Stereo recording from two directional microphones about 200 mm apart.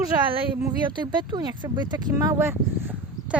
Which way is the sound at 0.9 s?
20° right (ahead or behind).